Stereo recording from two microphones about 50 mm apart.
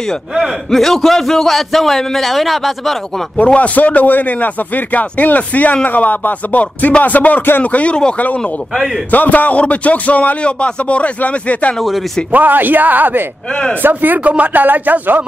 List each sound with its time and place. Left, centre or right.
0.7 s a man's voice: centre
3.5 s speech: left
8.7 s a man's voice: centre
9.1 s speech: left
12.3 s speech: right
13.5 s speech: centre
13.8 s speech: right